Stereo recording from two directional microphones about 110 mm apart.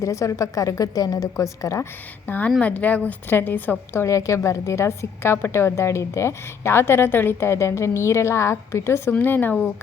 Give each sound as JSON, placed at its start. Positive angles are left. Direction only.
{"t": 0.0, "sound": "a woman's voice", "side_deg": 30}
{"t": 2.2, "sound": "a woman's voice", "side_deg": 15}